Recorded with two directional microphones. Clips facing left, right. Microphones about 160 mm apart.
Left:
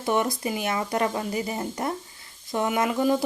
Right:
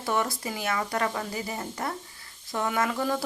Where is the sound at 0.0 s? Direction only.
20° left (ahead or behind).